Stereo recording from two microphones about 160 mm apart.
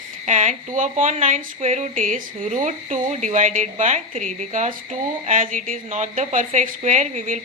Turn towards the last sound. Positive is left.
turn(degrees=-50)  # may be behind; listen again after turning